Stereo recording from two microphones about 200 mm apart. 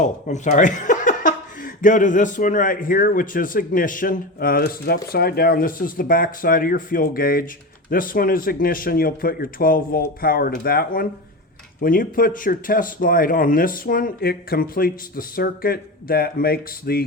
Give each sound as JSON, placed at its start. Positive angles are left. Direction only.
{"t": 0.0, "sound": "speech", "side_deg": 35}